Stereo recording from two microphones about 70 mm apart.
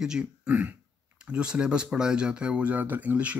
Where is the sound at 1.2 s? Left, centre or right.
Centre.